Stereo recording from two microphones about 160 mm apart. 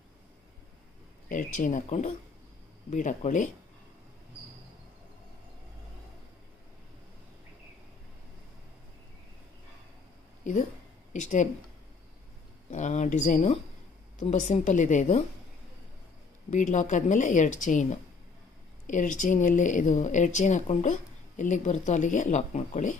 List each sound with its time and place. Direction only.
1.3 s speech: 55° left (ahead or behind)
11.1 s speech: 50° left (ahead or behind)
12.7 s speech: 50° left (ahead or behind)
16.4 s speech: 50° left (ahead or behind)